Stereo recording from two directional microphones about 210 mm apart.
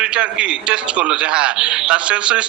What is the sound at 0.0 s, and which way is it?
A man's voice, 5° right (ahead or behind).